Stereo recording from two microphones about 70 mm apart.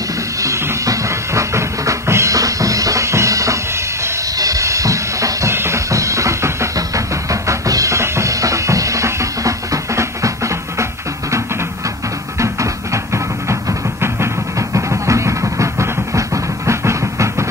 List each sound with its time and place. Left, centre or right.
0.4 s music: right
2.3 s music: right
4.4 s a sound: right
12.4 s music: right